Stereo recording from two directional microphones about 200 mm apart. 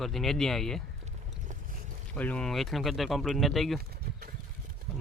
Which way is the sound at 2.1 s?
5° left (ahead or behind).